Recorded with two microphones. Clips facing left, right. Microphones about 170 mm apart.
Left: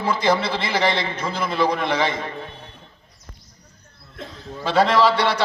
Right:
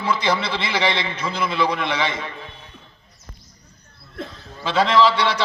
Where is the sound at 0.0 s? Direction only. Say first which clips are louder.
Left 2 dB; 45° left (ahead or behind).